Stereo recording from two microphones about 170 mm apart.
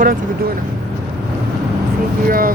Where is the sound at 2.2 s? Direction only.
55° right (ahead or behind).